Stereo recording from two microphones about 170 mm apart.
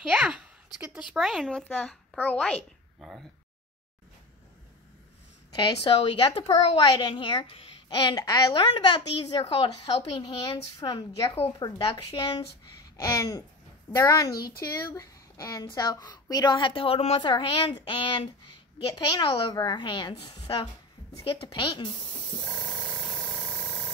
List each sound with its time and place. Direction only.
0.0 s speech: 5° right (ahead or behind)
5.5 s a child's voice: 25° left (ahead or behind)
14.3 s speech: 60° left (ahead or behind)
14.6 s a child's voice: 20° left (ahead or behind)
22.4 s wild animals: 5° left (ahead or behind)